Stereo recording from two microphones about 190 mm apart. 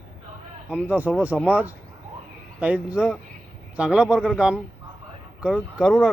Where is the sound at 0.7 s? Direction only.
10° right (ahead or behind).